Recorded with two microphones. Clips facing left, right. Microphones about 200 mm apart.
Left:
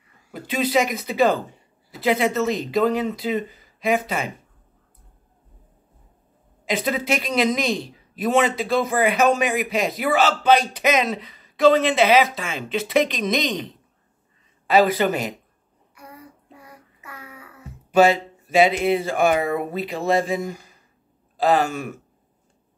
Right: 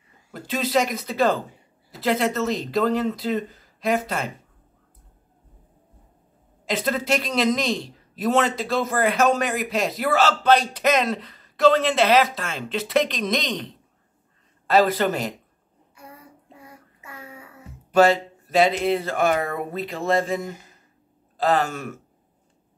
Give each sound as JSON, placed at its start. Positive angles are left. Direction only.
{"t": 0.3, "sound": "a man's voice", "side_deg": 0}
{"t": 6.6, "sound": "a man's voice", "side_deg": 0}
{"t": 16.5, "sound": "child singing", "side_deg": -25}
{"t": 17.9, "sound": "a man's voice", "side_deg": 5}